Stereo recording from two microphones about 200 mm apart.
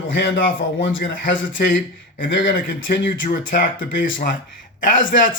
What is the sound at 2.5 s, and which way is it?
Speech, 50° left (ahead or behind).